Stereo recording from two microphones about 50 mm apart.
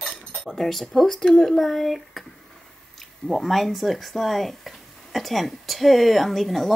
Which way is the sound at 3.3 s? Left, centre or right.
Centre.